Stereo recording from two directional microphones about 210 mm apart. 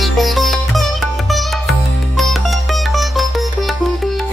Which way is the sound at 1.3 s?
Centre (ahead or behind).